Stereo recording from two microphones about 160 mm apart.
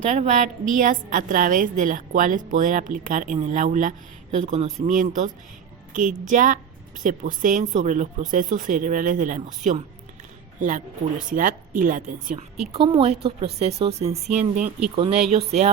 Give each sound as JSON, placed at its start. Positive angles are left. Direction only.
{"t": 0.1, "sound": "speech", "side_deg": -50}
{"t": 12.7, "sound": "a woman's voice", "side_deg": -35}